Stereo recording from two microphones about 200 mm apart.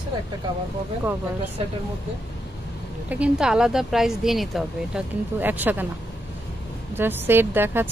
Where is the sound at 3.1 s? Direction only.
5° right (ahead or behind).